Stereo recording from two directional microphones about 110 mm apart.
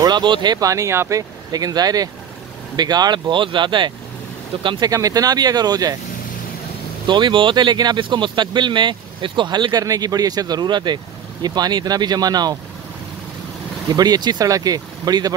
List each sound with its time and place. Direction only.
0.0 s speech: 40° right (ahead or behind)
7.1 s speech: 45° right (ahead or behind)
13.9 s speech: 40° right (ahead or behind)